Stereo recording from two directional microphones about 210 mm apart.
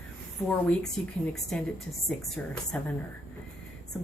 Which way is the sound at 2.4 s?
5° left (ahead or behind).